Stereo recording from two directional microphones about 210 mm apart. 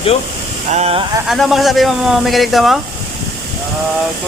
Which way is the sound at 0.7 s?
30° right (ahead or behind).